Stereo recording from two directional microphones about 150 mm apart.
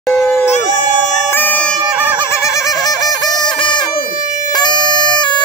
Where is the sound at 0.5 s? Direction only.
55° left (ahead or behind).